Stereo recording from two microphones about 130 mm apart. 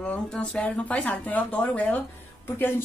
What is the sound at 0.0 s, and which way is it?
A woman's voice, 10° left (ahead or behind).